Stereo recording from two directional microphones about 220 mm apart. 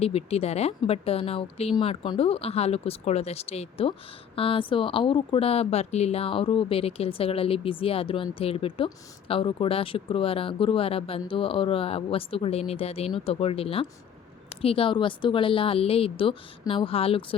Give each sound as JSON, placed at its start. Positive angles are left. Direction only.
{"t": 0.0, "sound": "speech", "side_deg": 30}